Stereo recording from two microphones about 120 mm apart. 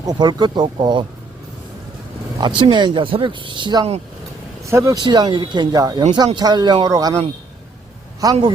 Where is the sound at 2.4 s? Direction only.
40° right (ahead or behind).